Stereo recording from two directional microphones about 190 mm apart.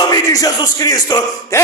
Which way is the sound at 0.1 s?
20° left (ahead or behind).